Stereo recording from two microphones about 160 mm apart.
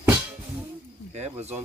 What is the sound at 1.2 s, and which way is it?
Speech, 40° right (ahead or behind).